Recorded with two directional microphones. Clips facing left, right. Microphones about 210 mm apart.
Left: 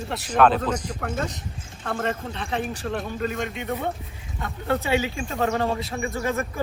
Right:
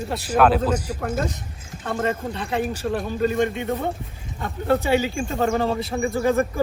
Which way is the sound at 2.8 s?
10° right (ahead or behind).